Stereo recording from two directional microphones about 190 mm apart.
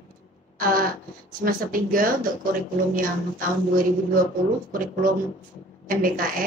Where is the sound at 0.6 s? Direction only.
50° right (ahead or behind).